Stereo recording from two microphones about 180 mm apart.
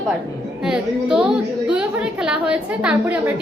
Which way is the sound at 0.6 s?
5° right (ahead or behind).